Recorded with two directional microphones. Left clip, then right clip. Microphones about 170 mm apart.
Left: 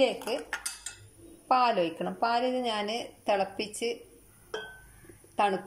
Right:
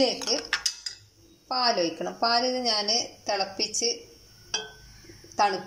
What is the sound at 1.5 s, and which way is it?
A woman's voice, centre (ahead or behind).